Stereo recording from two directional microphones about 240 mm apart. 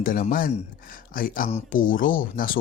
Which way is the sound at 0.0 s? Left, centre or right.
Left.